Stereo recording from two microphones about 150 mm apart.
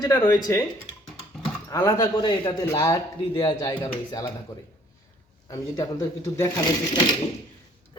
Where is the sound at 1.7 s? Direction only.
20° left (ahead or behind).